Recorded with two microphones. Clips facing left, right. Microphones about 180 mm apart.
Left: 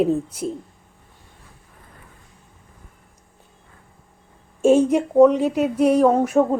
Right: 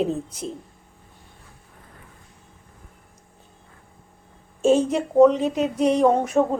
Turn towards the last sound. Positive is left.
turn(degrees=5)  # may be behind; listen again after turning